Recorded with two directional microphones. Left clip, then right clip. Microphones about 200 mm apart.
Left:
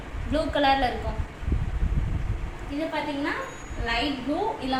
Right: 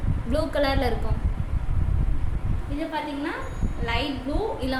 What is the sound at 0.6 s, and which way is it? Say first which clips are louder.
Speech: left 5 dB; 50° right (ahead or behind).